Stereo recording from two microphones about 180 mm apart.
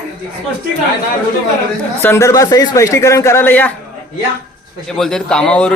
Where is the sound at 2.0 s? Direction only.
15° left (ahead or behind).